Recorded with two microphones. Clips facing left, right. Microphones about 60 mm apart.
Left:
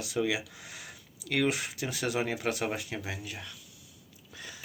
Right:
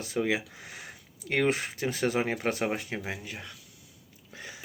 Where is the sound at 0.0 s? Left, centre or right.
Right.